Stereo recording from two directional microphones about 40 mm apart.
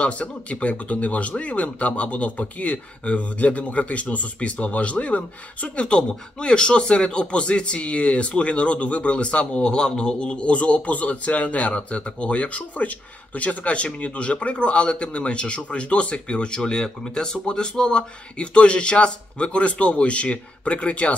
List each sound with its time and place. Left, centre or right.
0.0 s speech: left
5.9 s speech: left